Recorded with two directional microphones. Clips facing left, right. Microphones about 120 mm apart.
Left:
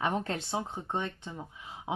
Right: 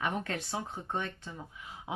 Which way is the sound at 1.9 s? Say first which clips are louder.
Left 4 dB; 25° left (ahead or behind).